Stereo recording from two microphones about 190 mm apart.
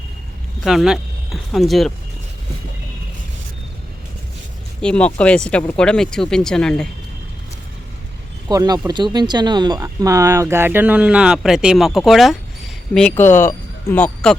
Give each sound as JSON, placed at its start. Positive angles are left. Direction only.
{"t": 0.6, "sound": "speech", "side_deg": 0}
{"t": 4.8, "sound": "speech", "side_deg": 5}
{"t": 8.4, "sound": "speech", "side_deg": -20}